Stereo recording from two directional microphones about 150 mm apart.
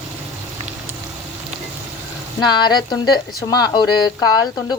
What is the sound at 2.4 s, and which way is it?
Speech, 30° left (ahead or behind).